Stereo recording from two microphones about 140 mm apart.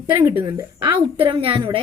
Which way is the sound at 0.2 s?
15° right (ahead or behind).